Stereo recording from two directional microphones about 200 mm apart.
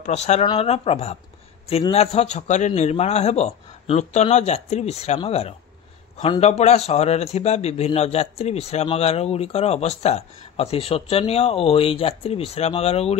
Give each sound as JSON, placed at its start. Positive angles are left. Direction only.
{"t": 0.0, "sound": "a man's voice", "side_deg": 35}